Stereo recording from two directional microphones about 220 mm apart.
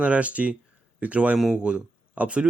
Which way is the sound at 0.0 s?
5° right (ahead or behind).